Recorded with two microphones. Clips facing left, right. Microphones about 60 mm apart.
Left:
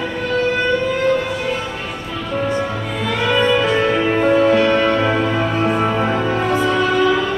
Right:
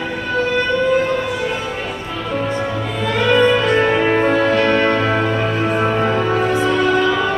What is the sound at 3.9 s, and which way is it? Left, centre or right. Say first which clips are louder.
Music: even; right.